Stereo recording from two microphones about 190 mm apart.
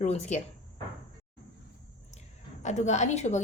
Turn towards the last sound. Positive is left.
turn(degrees=35)  # may be behind; listen again after turning